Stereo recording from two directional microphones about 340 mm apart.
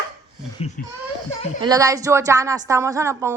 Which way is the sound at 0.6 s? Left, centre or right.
Centre.